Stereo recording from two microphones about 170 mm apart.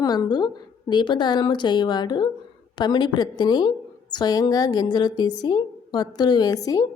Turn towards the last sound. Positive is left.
turn(degrees=20)  # may be behind; listen again after turning